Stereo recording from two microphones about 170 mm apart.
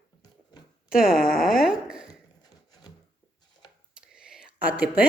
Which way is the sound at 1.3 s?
Centre (ahead or behind).